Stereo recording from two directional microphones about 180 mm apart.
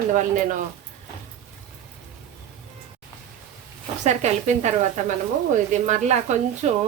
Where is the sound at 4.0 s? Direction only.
40° right (ahead or behind).